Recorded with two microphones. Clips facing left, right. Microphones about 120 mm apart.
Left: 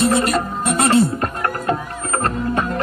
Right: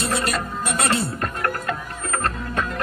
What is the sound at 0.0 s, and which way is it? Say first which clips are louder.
Music: left 7 dB; 30° left (ahead or behind).